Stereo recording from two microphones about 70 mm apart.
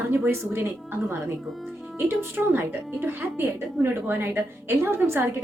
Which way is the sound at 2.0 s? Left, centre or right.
Right.